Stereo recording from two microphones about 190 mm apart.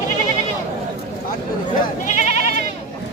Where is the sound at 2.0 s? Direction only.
40° left (ahead or behind).